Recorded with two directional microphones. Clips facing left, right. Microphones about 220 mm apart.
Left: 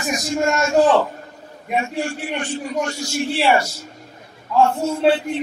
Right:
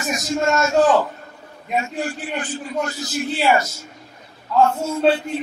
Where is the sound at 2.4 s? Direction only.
30° left (ahead or behind).